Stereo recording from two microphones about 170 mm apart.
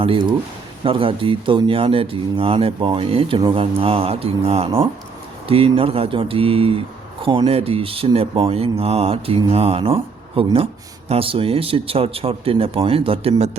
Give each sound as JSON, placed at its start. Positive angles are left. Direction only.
{"t": 0.0, "sound": "speech", "side_deg": -30}